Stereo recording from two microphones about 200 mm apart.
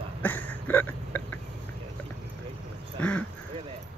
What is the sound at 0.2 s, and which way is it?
Hiccup, 10° left (ahead or behind).